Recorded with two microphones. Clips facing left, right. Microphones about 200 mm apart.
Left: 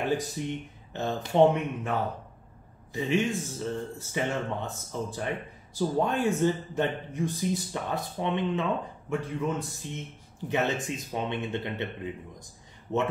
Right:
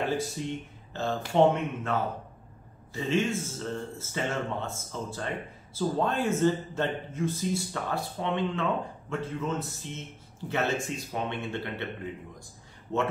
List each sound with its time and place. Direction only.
0.1 s a man's voice: 15° left (ahead or behind)
12.9 s speech: 20° left (ahead or behind)